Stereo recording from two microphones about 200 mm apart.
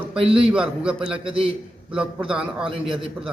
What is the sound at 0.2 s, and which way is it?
Speech, 25° right (ahead or behind).